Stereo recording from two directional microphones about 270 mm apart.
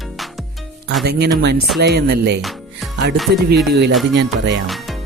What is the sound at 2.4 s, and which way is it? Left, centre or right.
Music, centre.